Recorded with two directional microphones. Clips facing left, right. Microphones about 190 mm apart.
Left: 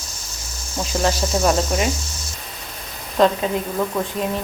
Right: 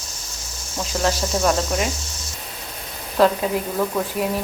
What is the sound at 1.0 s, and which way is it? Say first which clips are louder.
Snake: left 1 dB; 5° left (ahead or behind).